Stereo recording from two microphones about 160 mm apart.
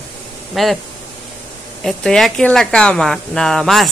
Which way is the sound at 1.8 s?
Centre (ahead or behind).